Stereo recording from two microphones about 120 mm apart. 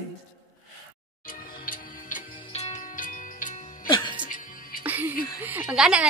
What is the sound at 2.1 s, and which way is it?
Music, 65° left (ahead or behind).